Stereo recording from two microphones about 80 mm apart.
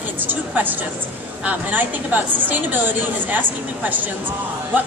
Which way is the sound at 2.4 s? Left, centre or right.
Right.